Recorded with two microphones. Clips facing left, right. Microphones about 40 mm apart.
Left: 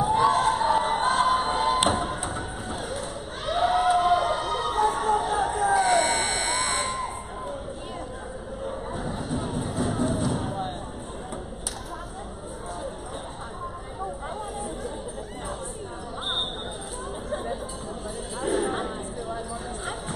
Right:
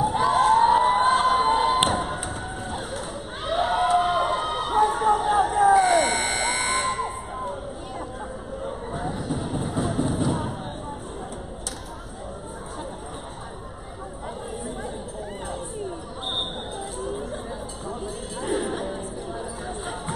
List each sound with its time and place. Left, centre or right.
0.0 s crowd: centre
0.7 s a sound: centre
1.0 s a sound: centre
1.9 s music: centre
3.4 s a sound: centre
4.0 s music: centre
5.1 s vehicle: centre
5.6 s emergency vehicle: centre
8.6 s vehicle: centre
9.3 s music: centre
18.4 s music: centre